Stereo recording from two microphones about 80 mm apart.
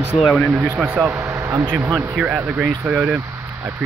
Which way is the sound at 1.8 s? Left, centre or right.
Right.